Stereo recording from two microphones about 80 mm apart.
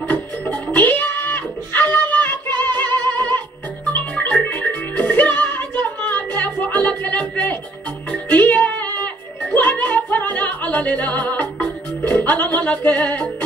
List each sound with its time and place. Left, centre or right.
0.7 s music: left